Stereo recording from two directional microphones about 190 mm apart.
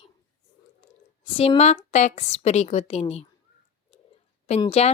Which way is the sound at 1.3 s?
30° left (ahead or behind).